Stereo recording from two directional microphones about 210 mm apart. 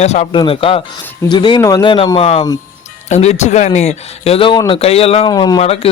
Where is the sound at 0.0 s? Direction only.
30° left (ahead or behind).